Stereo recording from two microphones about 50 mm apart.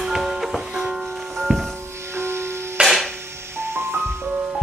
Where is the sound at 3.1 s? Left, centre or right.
Right.